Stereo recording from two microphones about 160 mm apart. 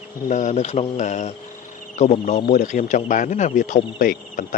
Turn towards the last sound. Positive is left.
turn(degrees=60)  # may be behind; listen again after turning